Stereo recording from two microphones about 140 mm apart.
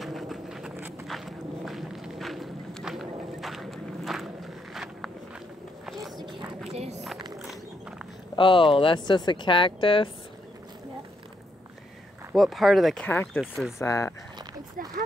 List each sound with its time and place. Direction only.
0.0 s a sound: centre (ahead or behind)
0.7 s walk: 15° right (ahead or behind)
1.0 s walk: centre (ahead or behind)
5.9 s a sound: centre (ahead or behind)
6.7 s a sound: 50° right (ahead or behind)
8.4 s speech: 35° left (ahead or behind)
12.4 s speech: centre (ahead or behind)
13.0 s speech: 15° left (ahead or behind)
13.4 s speech: centre (ahead or behind)
13.7 s speech: 20° left (ahead or behind)